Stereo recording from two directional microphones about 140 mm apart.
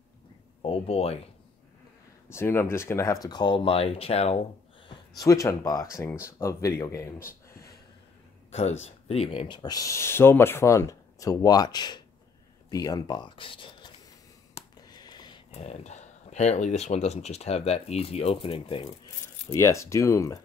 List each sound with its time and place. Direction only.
0.6 s speech: 45° left (ahead or behind)
2.2 s speech: 15° left (ahead or behind); by 4.5 s 45° left (ahead or behind)
4.8 s speech: 25° left (ahead or behind)
8.5 s speech: 50° left (ahead or behind)
14.5 s a sound: 30° left (ahead or behind)
15.5 s speech: 50° left (ahead or behind)
19.5 s speech: 20° left (ahead or behind)